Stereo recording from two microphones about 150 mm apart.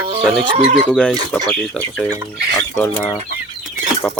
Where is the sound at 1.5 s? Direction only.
5° left (ahead or behind).